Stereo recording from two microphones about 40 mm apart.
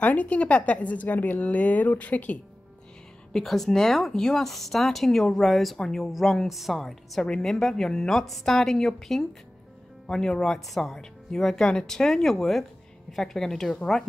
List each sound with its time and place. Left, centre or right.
0.0 s speech: left
3.4 s speech: centre
5.8 s a woman's voice: centre